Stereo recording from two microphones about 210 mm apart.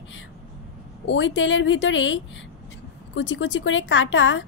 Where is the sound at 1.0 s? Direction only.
60° left (ahead or behind).